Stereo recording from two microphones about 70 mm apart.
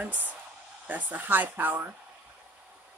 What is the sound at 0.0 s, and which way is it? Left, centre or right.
A woman's voice, right.